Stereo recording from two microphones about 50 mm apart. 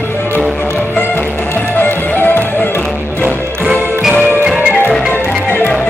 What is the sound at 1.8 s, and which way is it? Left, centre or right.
Music, left.